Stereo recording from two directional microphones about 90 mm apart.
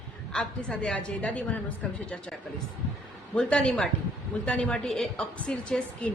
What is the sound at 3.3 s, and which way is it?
A woman's voice, 10° left (ahead or behind).